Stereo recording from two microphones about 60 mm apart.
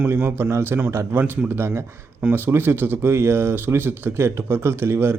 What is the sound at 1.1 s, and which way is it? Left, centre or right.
Speech, right.